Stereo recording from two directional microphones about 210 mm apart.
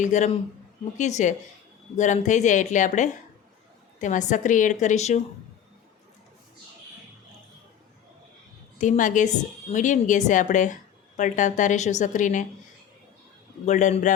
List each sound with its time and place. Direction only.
0.0 s a woman's voice: 35° left (ahead or behind)
8.8 s a woman's voice: 35° left (ahead or behind)
13.7 s a woman's voice: 35° left (ahead or behind)